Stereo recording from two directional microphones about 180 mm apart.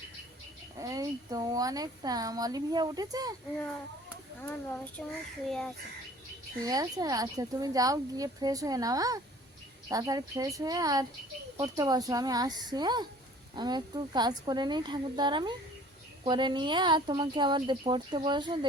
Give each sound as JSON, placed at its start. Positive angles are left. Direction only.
{"t": 0.8, "sound": "speech", "side_deg": -20}
{"t": 5.0, "sound": "a child's voice", "side_deg": 5}
{"t": 6.6, "sound": "speech", "side_deg": -20}